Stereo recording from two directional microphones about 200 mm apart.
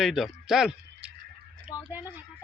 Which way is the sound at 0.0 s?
Centre (ahead or behind).